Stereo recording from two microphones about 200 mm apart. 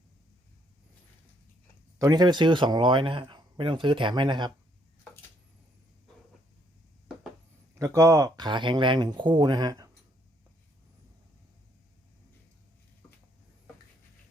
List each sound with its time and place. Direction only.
2.0 s speech: 20° right (ahead or behind)
7.8 s speech: 15° right (ahead or behind)